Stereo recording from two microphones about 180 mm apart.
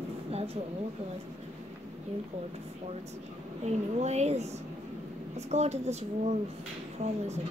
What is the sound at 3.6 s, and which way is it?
Speech, 40° right (ahead or behind).